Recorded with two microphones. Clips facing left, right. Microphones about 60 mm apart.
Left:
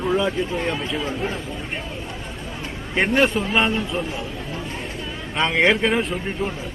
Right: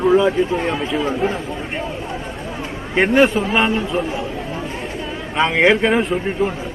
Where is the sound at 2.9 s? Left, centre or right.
Centre.